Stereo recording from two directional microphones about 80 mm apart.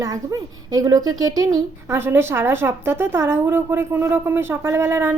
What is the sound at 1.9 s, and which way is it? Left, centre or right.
A woman's voice, right.